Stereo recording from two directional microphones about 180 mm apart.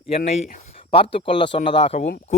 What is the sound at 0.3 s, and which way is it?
Speech, 35° left (ahead or behind).